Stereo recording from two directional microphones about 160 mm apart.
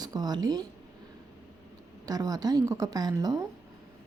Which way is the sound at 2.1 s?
25° right (ahead or behind).